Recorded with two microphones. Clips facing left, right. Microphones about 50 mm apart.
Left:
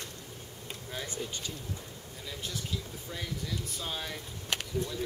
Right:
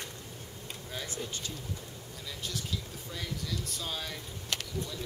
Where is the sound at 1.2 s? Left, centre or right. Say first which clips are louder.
Left 1 dB; centre.